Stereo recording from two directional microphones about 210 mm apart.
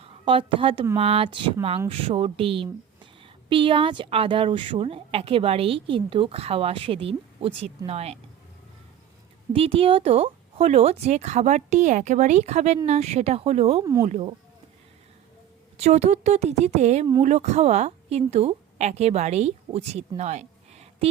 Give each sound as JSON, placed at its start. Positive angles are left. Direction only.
{"t": 0.0, "sound": "a woman's voice", "side_deg": -25}
{"t": 9.5, "sound": "speech", "side_deg": -25}
{"t": 13.8, "sound": "speech", "side_deg": -15}
{"t": 14.1, "sound": "a woman's voice", "side_deg": -25}
{"t": 15.8, "sound": "a woman's voice", "side_deg": -35}